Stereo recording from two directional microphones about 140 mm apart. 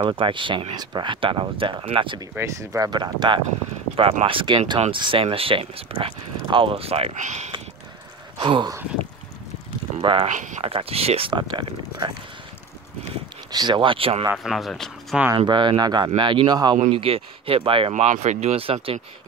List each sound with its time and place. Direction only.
0.0 s speech: 40° right (ahead or behind)
2.3 s speech: 20° right (ahead or behind); by 7.5 s 55° right (ahead or behind)
8.4 s speech: 35° right (ahead or behind)
10.2 s speech: 60° right (ahead or behind)
10.6 s speech: 40° right (ahead or behind)
13.5 s speech: 30° right (ahead or behind)
14.3 s speech: centre (ahead or behind)
15.3 s speech: 35° right (ahead or behind)
16.9 s speech: 40° right (ahead or behind)
18.0 s speech: 60° right (ahead or behind); by 18.9 s 40° right (ahead or behind)